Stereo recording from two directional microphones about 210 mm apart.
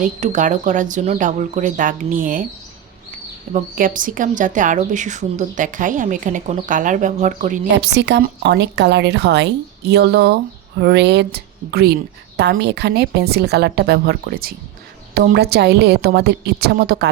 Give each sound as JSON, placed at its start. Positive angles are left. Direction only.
{"t": 0.0, "sound": "a woman's voice", "side_deg": -35}
{"t": 3.5, "sound": "a woman's voice", "side_deg": -40}
{"t": 7.7, "sound": "a woman's voice", "side_deg": -55}